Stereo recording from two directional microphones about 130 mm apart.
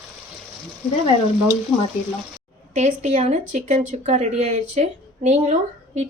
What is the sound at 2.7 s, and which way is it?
Speech, 60° right (ahead or behind).